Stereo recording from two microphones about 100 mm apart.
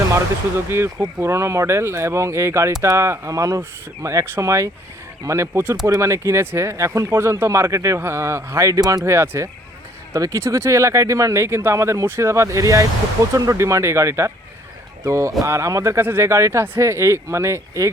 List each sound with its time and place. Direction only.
0.7 s speech: 25° right (ahead or behind)